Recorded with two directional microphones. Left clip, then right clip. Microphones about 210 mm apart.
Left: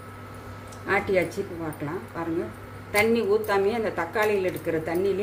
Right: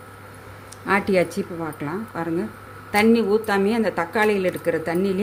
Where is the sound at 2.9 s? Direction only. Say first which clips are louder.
Right 4 dB; 45° right (ahead or behind).